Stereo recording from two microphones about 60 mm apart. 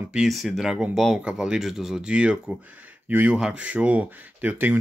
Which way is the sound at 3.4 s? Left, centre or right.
Centre.